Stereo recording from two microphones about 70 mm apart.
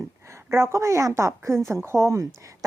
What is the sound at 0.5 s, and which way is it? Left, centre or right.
Speech, right.